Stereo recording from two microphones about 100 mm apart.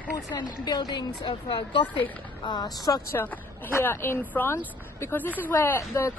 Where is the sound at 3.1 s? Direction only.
20° left (ahead or behind).